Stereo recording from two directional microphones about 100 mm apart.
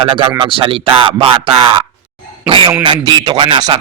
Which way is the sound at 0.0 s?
60° right (ahead or behind).